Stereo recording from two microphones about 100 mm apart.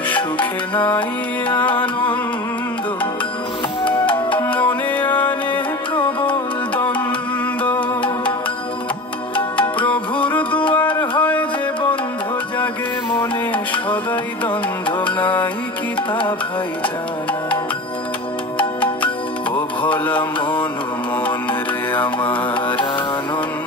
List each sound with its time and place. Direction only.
4.4 s music: 15° left (ahead or behind)
9.8 s music: 15° left (ahead or behind)
10.8 s a sound: 15° left (ahead or behind)
14.4 s music: 15° left (ahead or behind)
16.1 s music: 55° left (ahead or behind)
19.5 s music: 15° left (ahead or behind)